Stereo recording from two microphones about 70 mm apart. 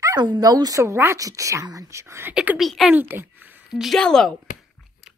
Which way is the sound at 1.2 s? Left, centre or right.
Right.